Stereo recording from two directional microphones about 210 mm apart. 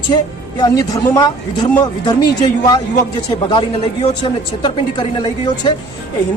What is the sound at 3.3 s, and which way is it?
Speech, 25° left (ahead or behind).